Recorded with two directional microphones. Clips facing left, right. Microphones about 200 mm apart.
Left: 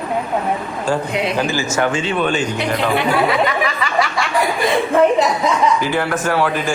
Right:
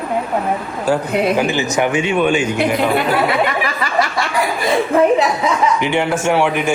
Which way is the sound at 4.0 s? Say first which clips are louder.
Even; centre (ahead or behind).